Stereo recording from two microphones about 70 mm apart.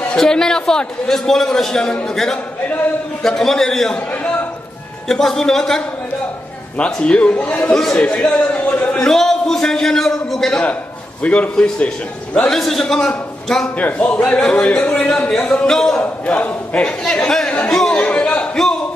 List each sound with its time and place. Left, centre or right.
0.2 s a man's voice: centre
5.0 s a man's voice: centre; by 7.7 s left
7.7 s a man's voice: centre
8.9 s a man's voice: centre
11.2 s a man's voice: centre
13.7 s a man's voice: centre
16.0 s a man's voice: left
17.9 s a sound: centre